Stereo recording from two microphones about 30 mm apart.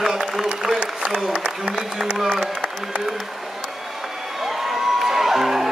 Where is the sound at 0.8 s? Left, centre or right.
Right.